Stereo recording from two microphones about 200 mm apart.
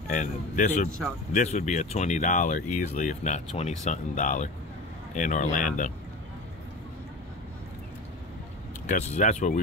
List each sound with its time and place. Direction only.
0.1 s speech: 40° left (ahead or behind)
8.8 s speech: 35° left (ahead or behind)